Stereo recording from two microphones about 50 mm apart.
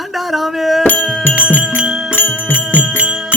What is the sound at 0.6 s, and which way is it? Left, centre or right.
Music, centre.